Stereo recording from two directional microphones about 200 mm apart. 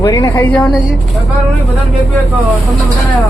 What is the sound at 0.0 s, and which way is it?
Speech, 15° left (ahead or behind).